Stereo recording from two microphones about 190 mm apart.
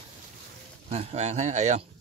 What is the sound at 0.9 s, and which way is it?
Speech, 35° right (ahead or behind).